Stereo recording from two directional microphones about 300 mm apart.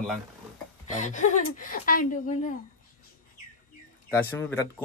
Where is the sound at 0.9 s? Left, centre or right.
Left.